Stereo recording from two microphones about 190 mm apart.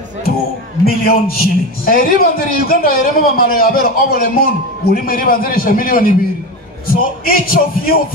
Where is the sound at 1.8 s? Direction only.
50° left (ahead or behind).